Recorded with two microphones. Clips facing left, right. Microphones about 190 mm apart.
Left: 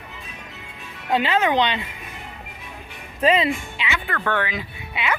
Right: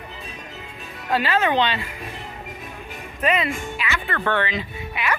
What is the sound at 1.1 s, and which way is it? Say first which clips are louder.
Speech: left 1 dB; 20° left (ahead or behind).